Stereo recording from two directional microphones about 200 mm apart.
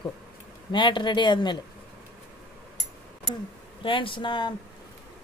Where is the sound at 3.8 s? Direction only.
25° left (ahead or behind).